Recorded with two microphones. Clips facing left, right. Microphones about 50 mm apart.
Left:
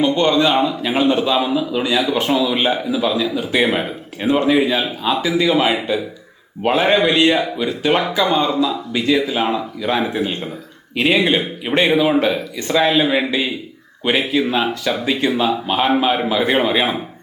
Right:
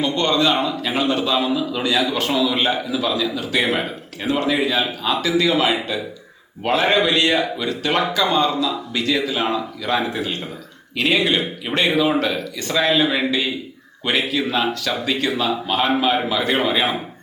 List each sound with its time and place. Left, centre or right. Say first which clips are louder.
0.0 s a man's voice: left 4 dB; centre